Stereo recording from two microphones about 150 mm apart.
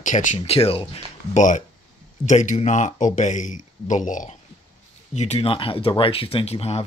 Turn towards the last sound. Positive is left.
turn(degrees=40)  # may be behind; listen again after turning